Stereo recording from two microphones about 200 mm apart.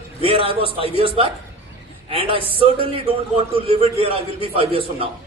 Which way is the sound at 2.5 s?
25° right (ahead or behind).